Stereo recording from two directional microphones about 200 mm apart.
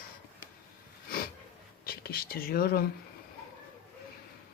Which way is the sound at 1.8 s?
50° left (ahead or behind).